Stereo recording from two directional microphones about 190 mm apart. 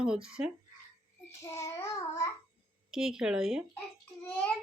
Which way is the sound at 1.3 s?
15° left (ahead or behind).